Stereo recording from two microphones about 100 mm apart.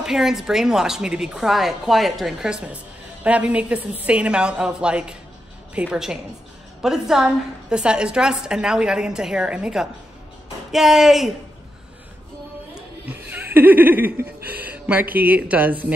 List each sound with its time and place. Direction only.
0.0 s a woman's voice: 5° right (ahead or behind)
13.1 s speech: 20° right (ahead or behind)